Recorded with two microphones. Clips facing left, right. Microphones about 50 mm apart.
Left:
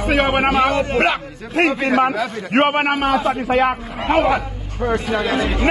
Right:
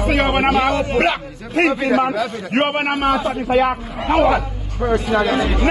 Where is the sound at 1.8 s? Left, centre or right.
Left.